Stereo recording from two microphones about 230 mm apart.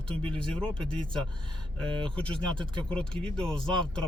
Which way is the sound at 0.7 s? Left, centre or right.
Right.